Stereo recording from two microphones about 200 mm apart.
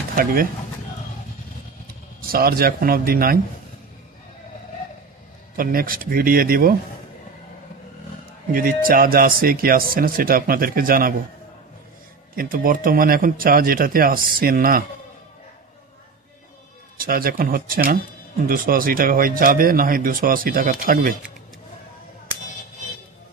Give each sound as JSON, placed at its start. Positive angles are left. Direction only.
{"t": 0.1, "sound": "speech", "side_deg": -45}
{"t": 2.2, "sound": "speech", "side_deg": -50}
{"t": 5.6, "sound": "speech", "side_deg": -45}
{"t": 8.5, "sound": "speech", "side_deg": -45}
{"t": 12.4, "sound": "speech", "side_deg": -45}
{"t": 17.0, "sound": "speech", "side_deg": -45}